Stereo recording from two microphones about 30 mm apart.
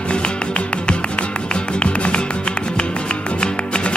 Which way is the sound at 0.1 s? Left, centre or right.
Left.